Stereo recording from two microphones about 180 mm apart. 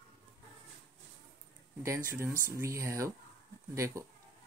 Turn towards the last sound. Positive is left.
turn(degrees=-15)  # may be behind; listen again after turning